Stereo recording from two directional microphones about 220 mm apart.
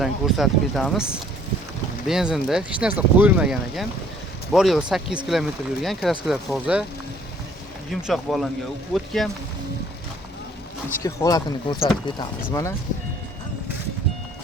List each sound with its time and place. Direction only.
0.0 s speech: centre (ahead or behind)
7.9 s speech: centre (ahead or behind)
11.0 s speech: 15° left (ahead or behind)